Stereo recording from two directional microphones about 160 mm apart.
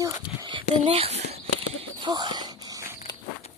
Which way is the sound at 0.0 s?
30° right (ahead or behind).